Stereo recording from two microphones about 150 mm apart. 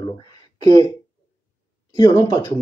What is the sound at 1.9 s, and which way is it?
Speech, 25° left (ahead or behind).